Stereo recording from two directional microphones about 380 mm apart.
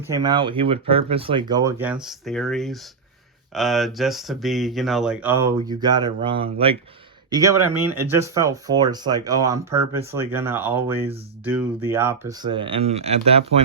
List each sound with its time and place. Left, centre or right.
0.1 s speech: centre